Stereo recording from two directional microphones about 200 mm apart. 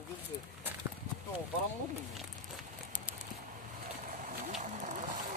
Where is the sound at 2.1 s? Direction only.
5° right (ahead or behind).